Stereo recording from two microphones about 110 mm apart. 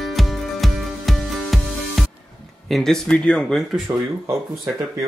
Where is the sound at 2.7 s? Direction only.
5° left (ahead or behind).